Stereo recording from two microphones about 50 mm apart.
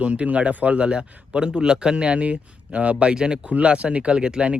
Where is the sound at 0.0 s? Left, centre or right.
Right.